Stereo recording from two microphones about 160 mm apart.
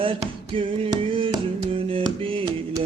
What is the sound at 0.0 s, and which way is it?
Music, 35° right (ahead or behind).